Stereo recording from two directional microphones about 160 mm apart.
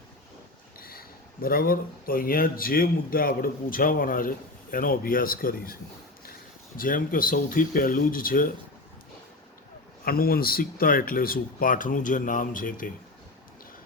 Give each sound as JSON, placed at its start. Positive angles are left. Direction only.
{"t": 0.8, "sound": "speech", "side_deg": 65}
{"t": 10.0, "sound": "speech", "side_deg": 65}